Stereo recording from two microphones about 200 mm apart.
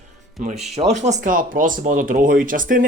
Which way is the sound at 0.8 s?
35° right (ahead or behind).